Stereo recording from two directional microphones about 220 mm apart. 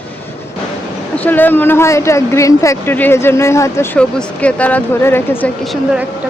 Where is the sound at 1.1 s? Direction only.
10° left (ahead or behind).